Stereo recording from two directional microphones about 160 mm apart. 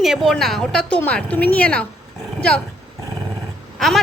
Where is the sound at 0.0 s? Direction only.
Centre (ahead or behind).